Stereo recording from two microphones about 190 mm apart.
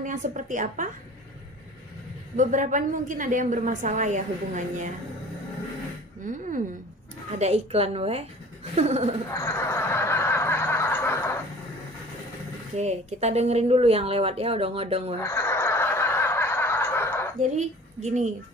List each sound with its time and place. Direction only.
0.0 s a woman's voice: 40° right (ahead or behind)
2.3 s a woman's voice: 40° right (ahead or behind)
6.2 s a woman's voice: 40° right (ahead or behind)
9.3 s snicker: 15° left (ahead or behind)
12.7 s a woman's voice: 35° right (ahead or behind)
15.2 s snicker: 15° left (ahead or behind)
17.4 s a woman's voice: 40° right (ahead or behind)